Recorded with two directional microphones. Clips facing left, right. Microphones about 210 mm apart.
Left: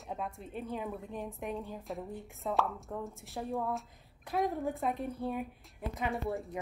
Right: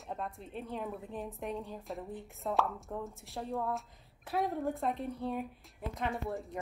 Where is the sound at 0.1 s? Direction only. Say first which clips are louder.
Left 1 dB; centre (ahead or behind).